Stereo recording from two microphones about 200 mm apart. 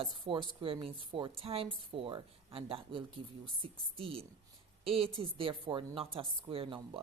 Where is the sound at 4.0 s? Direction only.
30° right (ahead or behind).